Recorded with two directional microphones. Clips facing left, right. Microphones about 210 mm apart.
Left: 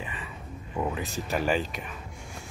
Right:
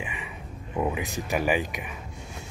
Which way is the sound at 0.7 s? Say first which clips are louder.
Right 3 dB; 15° right (ahead or behind).